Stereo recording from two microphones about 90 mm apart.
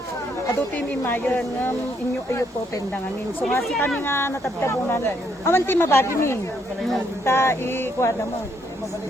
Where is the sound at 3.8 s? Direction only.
20° left (ahead or behind).